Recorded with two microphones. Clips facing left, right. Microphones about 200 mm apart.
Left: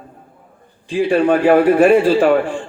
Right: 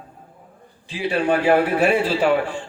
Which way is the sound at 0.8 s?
50° left (ahead or behind).